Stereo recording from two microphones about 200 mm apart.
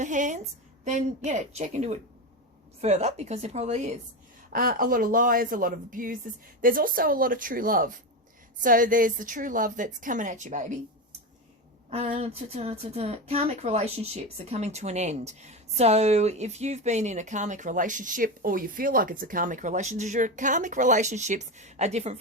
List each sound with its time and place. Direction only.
0.0 s a sound: 40° right (ahead or behind)
0.9 s speech: 35° right (ahead or behind)
11.9 s speech: 30° right (ahead or behind)